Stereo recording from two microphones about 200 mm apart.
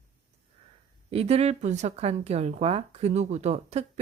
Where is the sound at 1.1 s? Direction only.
30° right (ahead or behind).